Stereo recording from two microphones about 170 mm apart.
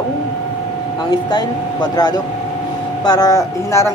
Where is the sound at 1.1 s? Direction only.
25° left (ahead or behind).